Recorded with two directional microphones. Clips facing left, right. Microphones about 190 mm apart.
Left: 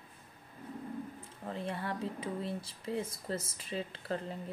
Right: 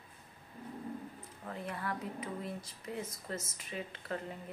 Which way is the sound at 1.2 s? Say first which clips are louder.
Left 3 dB; 30° left (ahead or behind).